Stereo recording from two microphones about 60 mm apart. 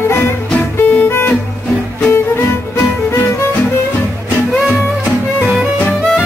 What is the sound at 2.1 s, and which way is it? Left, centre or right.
Music, left.